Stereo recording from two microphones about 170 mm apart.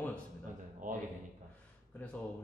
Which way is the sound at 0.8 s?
50° right (ahead or behind).